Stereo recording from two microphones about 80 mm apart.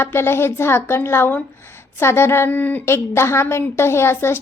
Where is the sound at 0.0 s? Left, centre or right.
Left.